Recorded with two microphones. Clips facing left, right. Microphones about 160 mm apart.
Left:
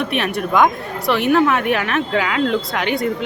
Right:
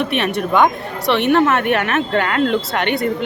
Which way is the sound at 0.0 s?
Centre (ahead or behind).